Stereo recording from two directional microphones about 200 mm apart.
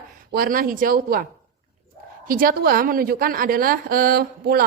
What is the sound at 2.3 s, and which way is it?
A woman's voice, 45° right (ahead or behind).